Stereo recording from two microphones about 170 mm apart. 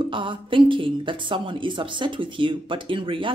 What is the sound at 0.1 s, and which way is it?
A woman's voice, 30° right (ahead or behind).